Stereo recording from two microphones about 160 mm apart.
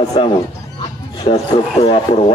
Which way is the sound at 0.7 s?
30° left (ahead or behind).